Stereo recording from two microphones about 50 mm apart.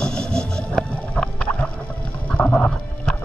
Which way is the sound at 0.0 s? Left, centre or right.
Centre.